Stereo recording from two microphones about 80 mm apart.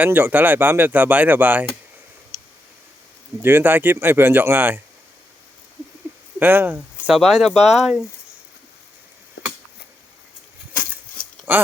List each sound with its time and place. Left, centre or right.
0.0 s speech: right
3.4 s speech: right
6.4 s speech: right
7.1 s speech: centre
11.5 s speech: right